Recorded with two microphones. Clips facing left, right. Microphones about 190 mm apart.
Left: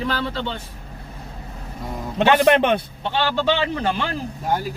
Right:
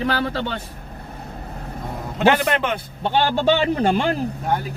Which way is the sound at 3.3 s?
45° right (ahead or behind).